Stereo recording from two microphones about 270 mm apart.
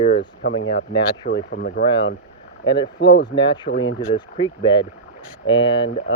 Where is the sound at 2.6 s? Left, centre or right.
Centre.